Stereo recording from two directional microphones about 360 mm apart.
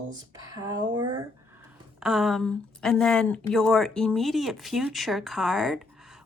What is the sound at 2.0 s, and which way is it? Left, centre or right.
Speech, centre.